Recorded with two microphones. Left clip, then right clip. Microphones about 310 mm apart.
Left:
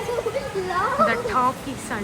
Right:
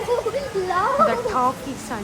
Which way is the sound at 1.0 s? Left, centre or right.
Centre.